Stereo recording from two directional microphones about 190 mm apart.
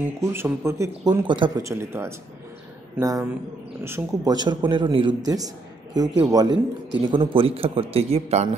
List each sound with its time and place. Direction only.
0.0 s a man's voice: 10° right (ahead or behind); by 8.5 s 35° right (ahead or behind)